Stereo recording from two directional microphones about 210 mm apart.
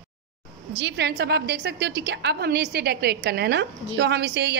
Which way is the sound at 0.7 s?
55° right (ahead or behind).